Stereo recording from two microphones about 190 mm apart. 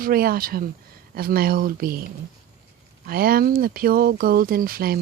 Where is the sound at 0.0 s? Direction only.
50° right (ahead or behind).